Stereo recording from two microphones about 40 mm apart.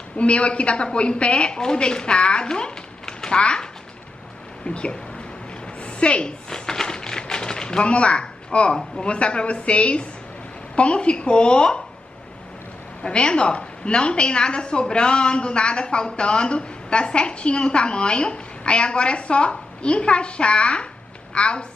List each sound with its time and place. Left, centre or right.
0.2 s a woman's voice: left
4.6 s a woman's voice: left
5.8 s a sound: left
6.5 s a sound: centre
9.0 s a woman's voice: left
13.0 s a woman's voice: left